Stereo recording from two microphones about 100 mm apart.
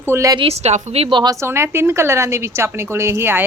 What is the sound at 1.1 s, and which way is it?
Speech, 50° right (ahead or behind).